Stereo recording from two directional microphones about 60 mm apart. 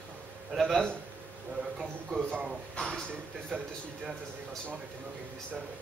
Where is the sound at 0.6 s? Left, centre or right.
Centre.